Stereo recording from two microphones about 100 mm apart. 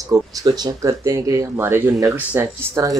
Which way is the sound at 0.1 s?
40° right (ahead or behind).